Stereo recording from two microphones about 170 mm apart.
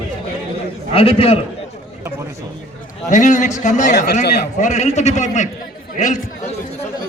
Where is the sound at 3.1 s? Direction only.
45° left (ahead or behind).